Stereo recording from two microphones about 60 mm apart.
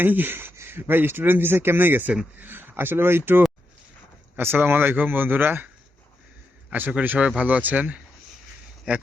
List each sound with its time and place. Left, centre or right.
0.0 s speech: right
7.0 s speech: right